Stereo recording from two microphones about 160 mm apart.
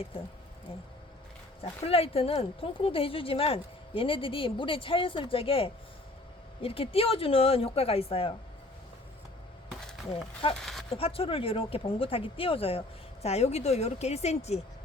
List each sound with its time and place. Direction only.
0.7 s speech: 35° left (ahead or behind)
10.5 s speech: centre (ahead or behind)
10.9 s a woman's voice: 35° left (ahead or behind)